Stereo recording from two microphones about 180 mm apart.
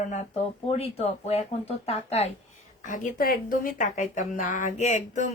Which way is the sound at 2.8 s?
50° left (ahead or behind).